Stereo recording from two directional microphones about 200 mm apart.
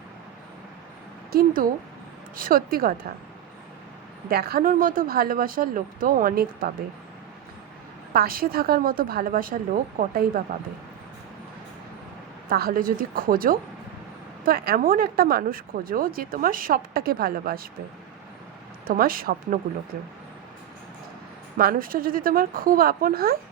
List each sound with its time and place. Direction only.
1.3 s speech: 45° right (ahead or behind)
4.3 s speech: 50° right (ahead or behind)
8.1 s speech: 50° right (ahead or behind)
12.5 s speech: 50° right (ahead or behind)
18.9 s speech: 45° right (ahead or behind)
21.6 s speech: 45° right (ahead or behind)